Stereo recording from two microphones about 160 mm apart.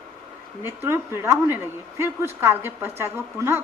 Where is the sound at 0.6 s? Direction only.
15° right (ahead or behind).